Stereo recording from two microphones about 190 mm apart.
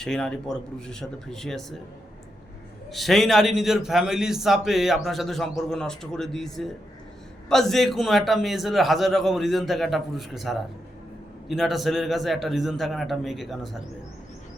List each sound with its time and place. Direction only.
0.0 s a man's voice: 5° left (ahead or behind)
2.9 s a man's voice: centre (ahead or behind)